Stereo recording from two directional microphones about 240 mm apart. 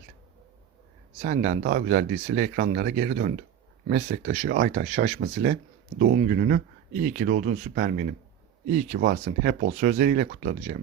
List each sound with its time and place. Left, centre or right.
1.2 s speech: right